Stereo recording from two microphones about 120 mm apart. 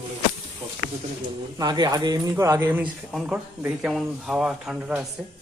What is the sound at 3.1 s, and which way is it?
Speech, 5° right (ahead or behind).